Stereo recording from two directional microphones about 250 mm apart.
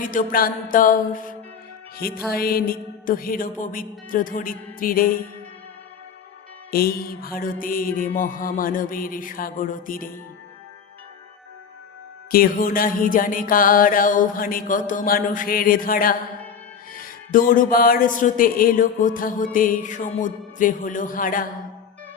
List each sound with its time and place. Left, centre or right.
0.0 s music: left
6.7 s music: left
12.3 s music: left